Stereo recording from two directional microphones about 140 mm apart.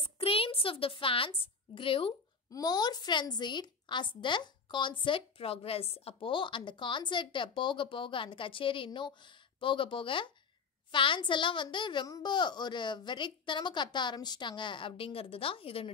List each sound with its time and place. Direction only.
0.0 s a woman's voice: 45° left (ahead or behind)